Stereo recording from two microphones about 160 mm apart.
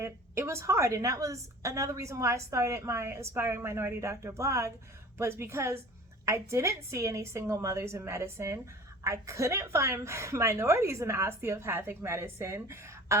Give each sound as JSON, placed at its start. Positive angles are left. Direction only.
{"t": 0.0, "sound": "a woman's voice", "side_deg": -15}